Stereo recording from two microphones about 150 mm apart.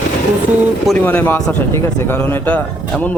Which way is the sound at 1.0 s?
15° left (ahead or behind).